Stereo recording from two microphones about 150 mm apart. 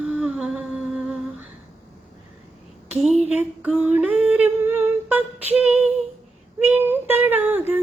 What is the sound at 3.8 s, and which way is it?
Humming, 10° right (ahead or behind).